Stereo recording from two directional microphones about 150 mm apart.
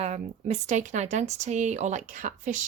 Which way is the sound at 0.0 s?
45° right (ahead or behind).